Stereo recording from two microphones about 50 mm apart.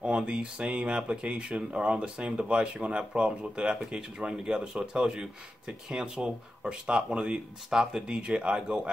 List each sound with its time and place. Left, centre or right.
0.0 s speech: centre